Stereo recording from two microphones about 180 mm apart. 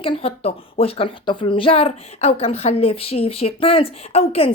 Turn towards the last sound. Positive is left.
turn(degrees=30)  # may be behind; listen again after turning